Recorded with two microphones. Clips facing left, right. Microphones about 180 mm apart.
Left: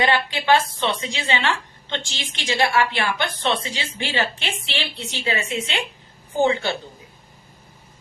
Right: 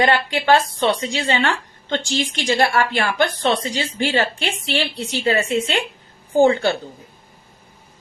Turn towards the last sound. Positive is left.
turn(degrees=-40)  # may be behind; listen again after turning